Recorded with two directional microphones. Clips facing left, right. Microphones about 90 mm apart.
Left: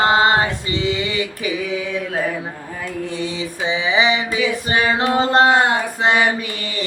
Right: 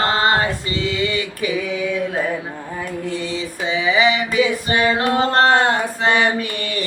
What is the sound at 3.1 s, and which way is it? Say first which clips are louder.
Mantra: even; 20° left (ahead or behind).